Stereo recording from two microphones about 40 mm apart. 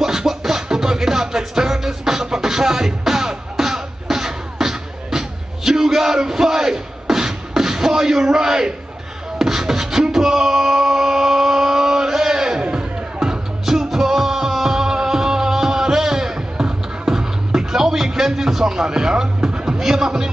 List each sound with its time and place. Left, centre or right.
0.0 s music: centre
9.4 s beatboxing: centre
12.6 s music: centre
19.8 s a sound: centre